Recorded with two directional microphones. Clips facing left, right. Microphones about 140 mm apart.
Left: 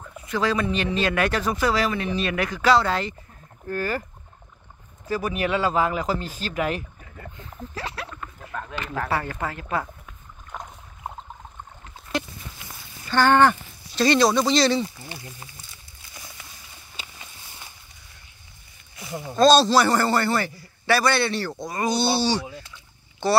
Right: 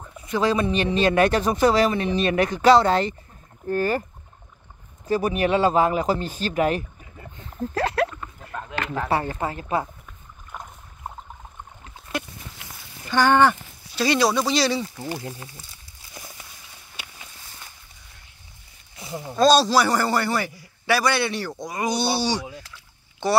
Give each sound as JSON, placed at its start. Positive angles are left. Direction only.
{"t": 0.3, "sound": "speech", "side_deg": -20}
{"t": 5.0, "sound": "speech", "side_deg": -25}
{"t": 7.7, "sound": "speech", "side_deg": -50}
{"t": 8.2, "sound": "a sound", "side_deg": -15}
{"t": 8.9, "sound": "speech", "side_deg": -20}
{"t": 10.5, "sound": "boat", "side_deg": 0}
{"t": 13.1, "sound": "a man's voice", "side_deg": -10}
{"t": 15.0, "sound": "speech", "side_deg": -40}
{"t": 19.1, "sound": "a man's voice", "side_deg": -10}
{"t": 23.2, "sound": "a man's voice", "side_deg": -15}